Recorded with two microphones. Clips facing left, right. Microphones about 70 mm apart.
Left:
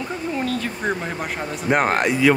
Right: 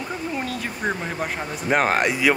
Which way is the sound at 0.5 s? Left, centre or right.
Centre.